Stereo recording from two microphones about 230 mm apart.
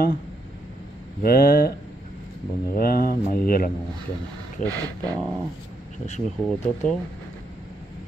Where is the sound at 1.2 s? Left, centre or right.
Left.